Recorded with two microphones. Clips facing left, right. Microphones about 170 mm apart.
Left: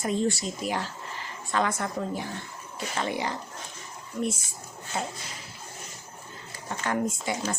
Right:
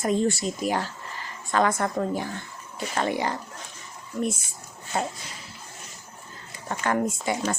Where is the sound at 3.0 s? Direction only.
50° right (ahead or behind).